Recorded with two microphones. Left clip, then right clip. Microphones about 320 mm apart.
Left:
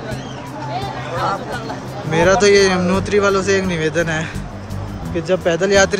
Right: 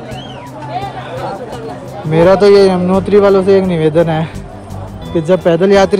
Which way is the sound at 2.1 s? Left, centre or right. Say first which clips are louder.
Right 5 dB; centre.